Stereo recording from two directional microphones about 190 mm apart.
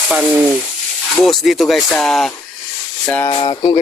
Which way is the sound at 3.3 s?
25° left (ahead or behind).